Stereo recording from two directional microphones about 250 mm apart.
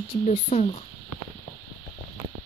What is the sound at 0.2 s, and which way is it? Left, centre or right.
Speech, left.